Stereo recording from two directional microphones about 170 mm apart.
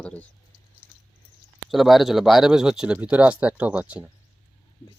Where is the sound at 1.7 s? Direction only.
Centre (ahead or behind).